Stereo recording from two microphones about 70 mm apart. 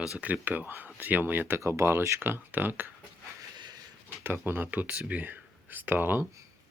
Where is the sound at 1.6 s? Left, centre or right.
Right.